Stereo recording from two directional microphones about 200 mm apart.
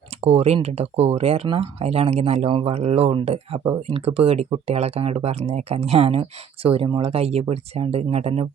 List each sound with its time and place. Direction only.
0.2 s speech: 30° right (ahead or behind)